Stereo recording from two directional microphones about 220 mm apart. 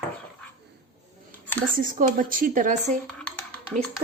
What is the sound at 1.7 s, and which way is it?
Speech, 40° right (ahead or behind).